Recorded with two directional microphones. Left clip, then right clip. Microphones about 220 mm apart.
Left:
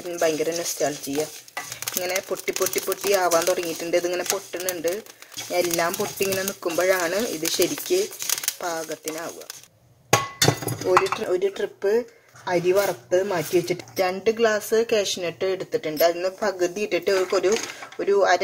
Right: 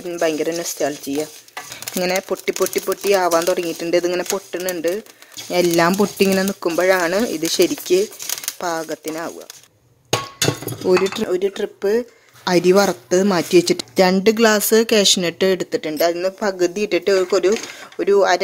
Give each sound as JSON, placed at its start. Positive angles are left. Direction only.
{"t": 0.1, "sound": "speech", "side_deg": -45}
{"t": 11.1, "sound": "speech", "side_deg": -40}